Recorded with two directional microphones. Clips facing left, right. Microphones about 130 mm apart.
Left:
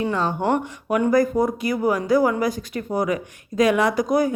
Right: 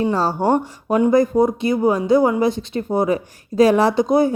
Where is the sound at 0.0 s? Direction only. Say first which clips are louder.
Right 4 dB; 35° right (ahead or behind).